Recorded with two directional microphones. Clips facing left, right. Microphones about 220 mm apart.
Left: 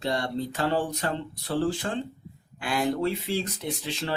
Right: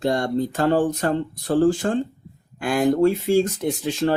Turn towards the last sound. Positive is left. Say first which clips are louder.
# right 10 dB
turn(degrees=-50)  # may be behind; listen again after turning